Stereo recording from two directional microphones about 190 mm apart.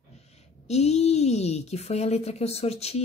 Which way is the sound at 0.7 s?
35° left (ahead or behind).